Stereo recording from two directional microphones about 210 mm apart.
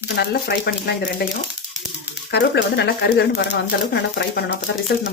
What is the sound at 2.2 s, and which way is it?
Speech, 55° left (ahead or behind).